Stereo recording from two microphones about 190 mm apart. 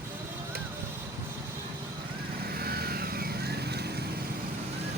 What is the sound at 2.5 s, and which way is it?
Vehicle, 55° right (ahead or behind).